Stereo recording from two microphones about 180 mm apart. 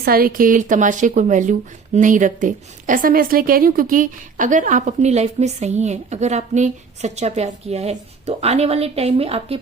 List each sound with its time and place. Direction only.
0.0 s speech: 55° right (ahead or behind); by 9.6 s 35° right (ahead or behind)